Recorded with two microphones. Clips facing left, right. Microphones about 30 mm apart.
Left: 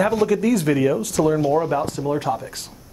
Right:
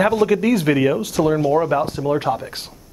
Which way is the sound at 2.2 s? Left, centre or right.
Right.